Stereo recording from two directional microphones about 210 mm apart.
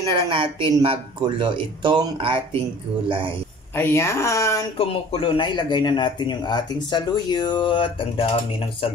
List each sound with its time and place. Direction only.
0.1 s speech: 25° right (ahead or behind)
3.7 s speech: 10° left (ahead or behind)